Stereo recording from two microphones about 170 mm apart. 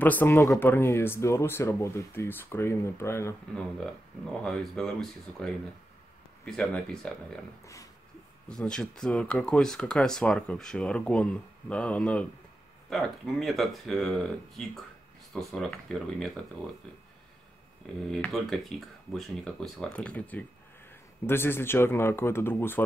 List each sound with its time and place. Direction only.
0.0 s speech: 10° left (ahead or behind)
4.3 s speech: 5° left (ahead or behind)
7.6 s speech: 20° left (ahead or behind)
8.5 s speech: 5° left (ahead or behind)
18.1 s speech: 5° left (ahead or behind)